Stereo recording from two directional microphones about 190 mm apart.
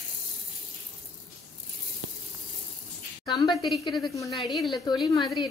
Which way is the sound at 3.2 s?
25° left (ahead or behind).